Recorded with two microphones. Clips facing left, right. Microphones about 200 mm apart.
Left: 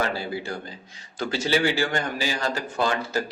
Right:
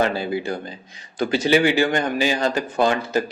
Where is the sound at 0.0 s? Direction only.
20° right (ahead or behind).